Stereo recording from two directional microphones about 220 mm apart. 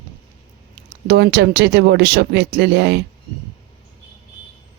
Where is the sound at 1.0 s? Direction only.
50° right (ahead or behind).